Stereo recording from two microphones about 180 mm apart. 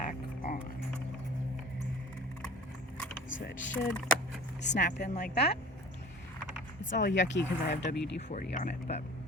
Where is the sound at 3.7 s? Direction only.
5° left (ahead or behind).